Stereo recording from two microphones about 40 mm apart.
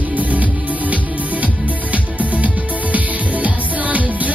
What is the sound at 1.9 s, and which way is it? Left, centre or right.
Music, right.